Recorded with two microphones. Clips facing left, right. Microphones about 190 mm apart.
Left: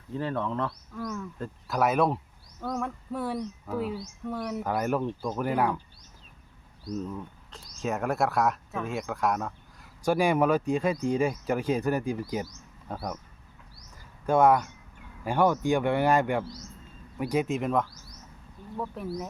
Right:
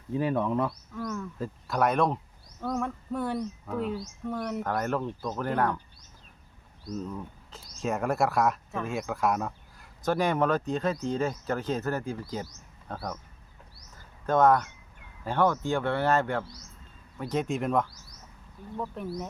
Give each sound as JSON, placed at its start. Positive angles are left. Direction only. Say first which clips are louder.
{"t": 0.1, "sound": "speech", "louder": "right 4 dB", "side_deg": -15}
{"t": 0.9, "sound": "speech", "louder": "left 1 dB", "side_deg": 0}
{"t": 6.9, "sound": "speech", "louder": "left 1 dB", "side_deg": 0}
{"t": 10.0, "sound": "speech", "louder": "left 2 dB", "side_deg": 10}
{"t": 14.3, "sound": "speech", "louder": "left 1 dB", "side_deg": 10}